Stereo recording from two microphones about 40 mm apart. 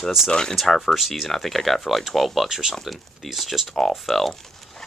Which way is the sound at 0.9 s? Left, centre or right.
Centre.